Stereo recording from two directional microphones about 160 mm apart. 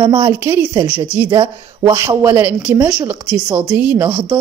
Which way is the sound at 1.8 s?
15° right (ahead or behind).